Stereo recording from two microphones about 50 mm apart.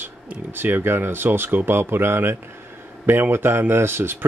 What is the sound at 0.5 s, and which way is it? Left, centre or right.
A man's voice, right.